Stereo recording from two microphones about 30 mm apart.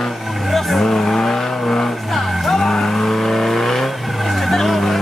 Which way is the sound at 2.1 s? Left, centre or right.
Centre.